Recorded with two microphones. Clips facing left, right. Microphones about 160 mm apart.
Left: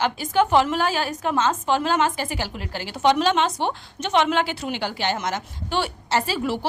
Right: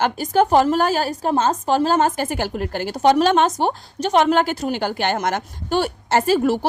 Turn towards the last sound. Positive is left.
turn(degrees=-50)  # may be behind; listen again after turning